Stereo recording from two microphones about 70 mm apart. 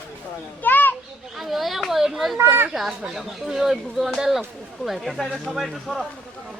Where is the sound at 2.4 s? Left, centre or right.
Right.